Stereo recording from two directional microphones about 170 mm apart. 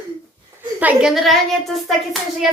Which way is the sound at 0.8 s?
5° right (ahead or behind).